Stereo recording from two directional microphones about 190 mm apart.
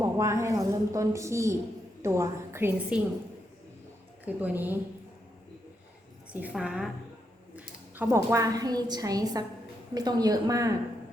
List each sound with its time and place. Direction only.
0.0 s a woman's voice: 15° right (ahead or behind)
4.3 s a woman's voice: 10° right (ahead or behind)
6.3 s a woman's voice: 5° right (ahead or behind)